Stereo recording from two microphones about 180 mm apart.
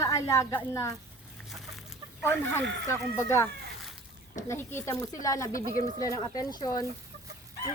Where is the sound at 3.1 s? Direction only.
15° left (ahead or behind).